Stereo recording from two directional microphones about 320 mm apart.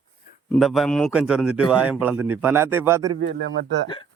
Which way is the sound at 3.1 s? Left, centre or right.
Right.